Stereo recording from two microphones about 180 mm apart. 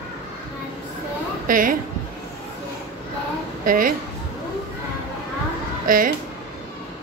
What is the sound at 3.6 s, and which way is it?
Speech, 50° right (ahead or behind).